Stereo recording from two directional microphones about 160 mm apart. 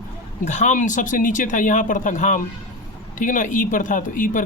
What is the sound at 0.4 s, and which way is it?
Speech, 50° left (ahead or behind).